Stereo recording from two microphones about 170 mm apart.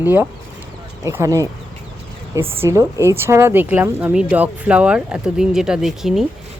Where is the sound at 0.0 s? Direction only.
10° right (ahead or behind).